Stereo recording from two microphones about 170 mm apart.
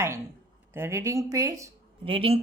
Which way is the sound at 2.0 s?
30° right (ahead or behind).